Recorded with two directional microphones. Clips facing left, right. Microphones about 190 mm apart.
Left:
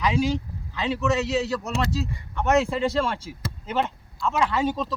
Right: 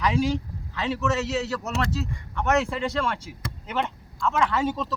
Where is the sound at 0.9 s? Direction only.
25° left (ahead or behind).